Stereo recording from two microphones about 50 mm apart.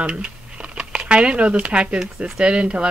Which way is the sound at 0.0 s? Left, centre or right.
Right.